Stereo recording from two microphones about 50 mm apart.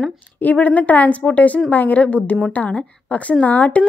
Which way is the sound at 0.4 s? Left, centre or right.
Left.